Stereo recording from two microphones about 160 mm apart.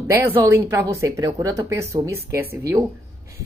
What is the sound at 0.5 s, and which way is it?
A woman's voice, 15° right (ahead or behind).